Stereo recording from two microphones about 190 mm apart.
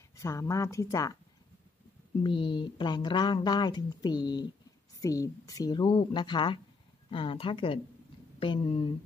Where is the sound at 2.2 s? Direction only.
25° left (ahead or behind).